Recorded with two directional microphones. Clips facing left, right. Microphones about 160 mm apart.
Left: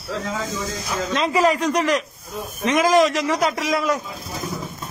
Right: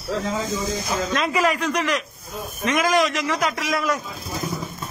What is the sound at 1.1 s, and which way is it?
Speech, 25° left (ahead or behind).